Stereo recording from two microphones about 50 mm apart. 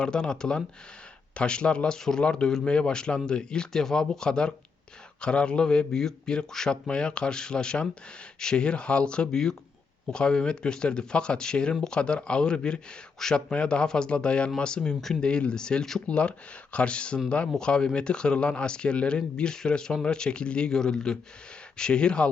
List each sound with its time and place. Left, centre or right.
0.0 s a man's voice: centre
9.3 s speech: centre
11.9 s a man's voice: left
16.0 s a man's voice: left